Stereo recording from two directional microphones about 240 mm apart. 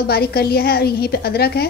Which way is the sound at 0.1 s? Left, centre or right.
Left.